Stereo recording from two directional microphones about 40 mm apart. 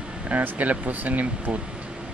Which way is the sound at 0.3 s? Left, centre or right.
Right.